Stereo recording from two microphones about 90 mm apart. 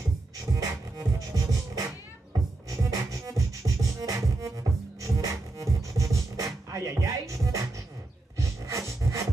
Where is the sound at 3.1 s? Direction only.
35° right (ahead or behind).